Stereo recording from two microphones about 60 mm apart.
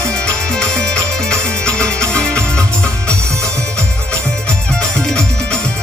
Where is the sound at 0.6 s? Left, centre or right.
Centre.